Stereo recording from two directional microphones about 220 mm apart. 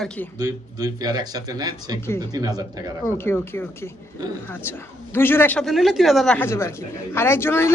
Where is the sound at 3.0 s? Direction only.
10° left (ahead or behind).